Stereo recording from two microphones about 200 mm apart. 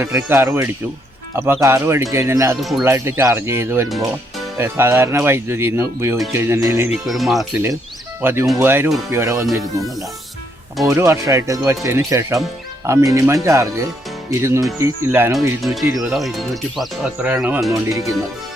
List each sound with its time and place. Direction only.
0.0 s speech: 10° right (ahead or behind)
2.6 s speech: centre (ahead or behind)
2.8 s speech: 10° right (ahead or behind)
7.1 s speech: centre (ahead or behind)
8.2 s speech: 10° right (ahead or behind)
10.8 s speech: 15° right (ahead or behind)
15.6 s speech: centre (ahead or behind); by 18.0 s 15° right (ahead or behind)